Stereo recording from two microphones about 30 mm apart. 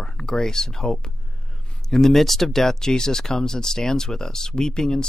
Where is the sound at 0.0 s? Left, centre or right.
Left.